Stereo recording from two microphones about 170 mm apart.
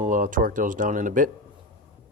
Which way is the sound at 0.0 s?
50° right (ahead or behind).